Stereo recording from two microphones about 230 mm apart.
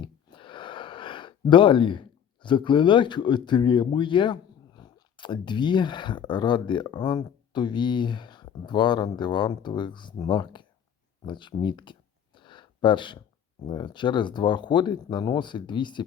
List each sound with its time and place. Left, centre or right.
0.0 s speech: left
11.3 s a sound: centre
13.7 s speech: centre